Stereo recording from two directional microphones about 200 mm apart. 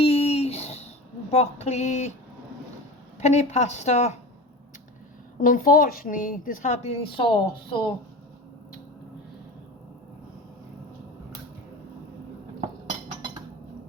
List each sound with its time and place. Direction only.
0.0 s a sound: 30° left (ahead or behind)
1.3 s a woman's voice: 30° left (ahead or behind)
3.2 s a woman's voice: 35° left (ahead or behind)
5.4 s a woman's voice: 45° left (ahead or behind); by 7.9 s 25° left (ahead or behind)